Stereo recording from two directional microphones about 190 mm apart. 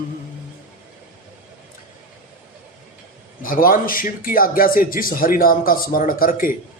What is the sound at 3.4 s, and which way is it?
Speech, 45° left (ahead or behind).